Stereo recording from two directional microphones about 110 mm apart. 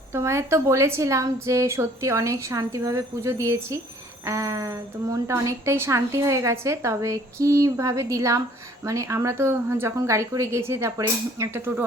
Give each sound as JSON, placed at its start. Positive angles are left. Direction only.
{"t": 0.1, "sound": "a woman's voice", "side_deg": -25}